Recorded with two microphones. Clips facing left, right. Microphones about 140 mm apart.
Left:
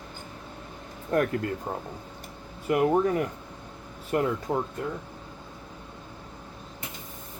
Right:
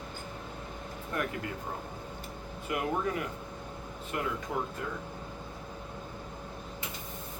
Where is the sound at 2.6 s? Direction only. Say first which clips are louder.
Left 9 dB; 45° left (ahead or behind).